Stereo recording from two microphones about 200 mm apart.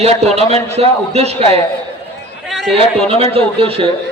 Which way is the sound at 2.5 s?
Centre (ahead or behind).